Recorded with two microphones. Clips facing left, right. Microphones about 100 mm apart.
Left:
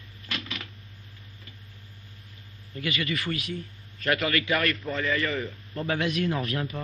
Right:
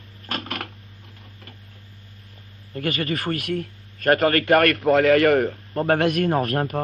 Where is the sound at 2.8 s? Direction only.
45° right (ahead or behind).